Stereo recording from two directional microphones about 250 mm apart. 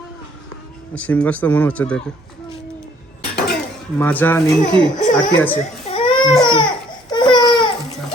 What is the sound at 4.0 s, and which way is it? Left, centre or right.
Speech, centre.